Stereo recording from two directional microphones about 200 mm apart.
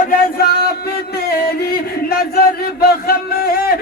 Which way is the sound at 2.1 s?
50° left (ahead or behind).